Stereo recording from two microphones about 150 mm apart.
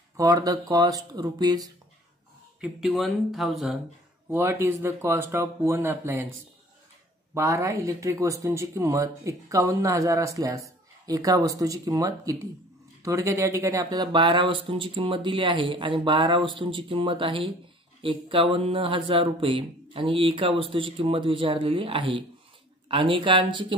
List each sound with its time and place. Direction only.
0.2 s speech: 25° right (ahead or behind)
2.6 s speech: centre (ahead or behind)
4.3 s speech: 15° right (ahead or behind)
7.3 s speech: 20° right (ahead or behind)